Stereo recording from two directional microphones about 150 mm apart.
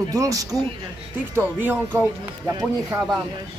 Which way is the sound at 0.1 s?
25° right (ahead or behind).